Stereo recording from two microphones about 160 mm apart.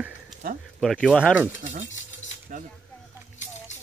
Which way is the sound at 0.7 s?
Centre (ahead or behind).